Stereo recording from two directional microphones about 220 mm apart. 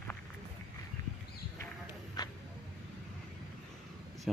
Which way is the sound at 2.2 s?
15° left (ahead or behind).